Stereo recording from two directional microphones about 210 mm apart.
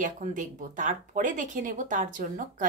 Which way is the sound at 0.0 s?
35° right (ahead or behind).